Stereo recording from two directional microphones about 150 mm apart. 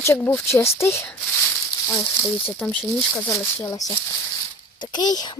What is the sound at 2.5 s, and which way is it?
Speech, 10° left (ahead or behind).